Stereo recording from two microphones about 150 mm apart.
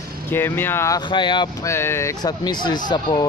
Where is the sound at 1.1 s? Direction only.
30° left (ahead or behind).